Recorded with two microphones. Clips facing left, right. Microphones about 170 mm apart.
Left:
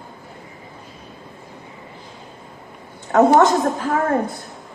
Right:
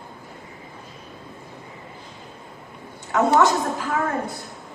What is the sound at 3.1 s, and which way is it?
Speech, 45° left (ahead or behind).